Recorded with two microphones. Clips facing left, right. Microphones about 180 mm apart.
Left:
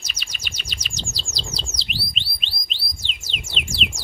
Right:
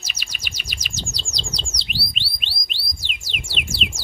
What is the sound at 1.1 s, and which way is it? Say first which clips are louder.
Bird: even; 5° left (ahead or behind).